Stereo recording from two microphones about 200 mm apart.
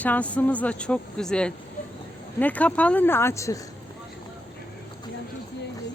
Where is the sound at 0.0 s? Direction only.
5° left (ahead or behind).